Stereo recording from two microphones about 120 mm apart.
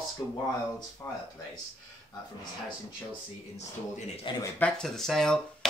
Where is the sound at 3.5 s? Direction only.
70° left (ahead or behind).